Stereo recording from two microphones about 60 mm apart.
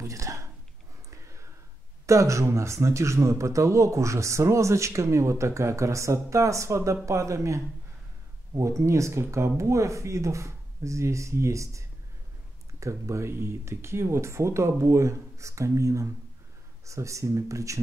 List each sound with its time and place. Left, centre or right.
0.0 s a sound: right
2.0 s speech: right
12.8 s speech: right